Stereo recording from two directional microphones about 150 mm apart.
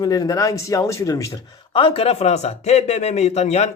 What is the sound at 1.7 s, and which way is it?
Speech, 35° left (ahead or behind).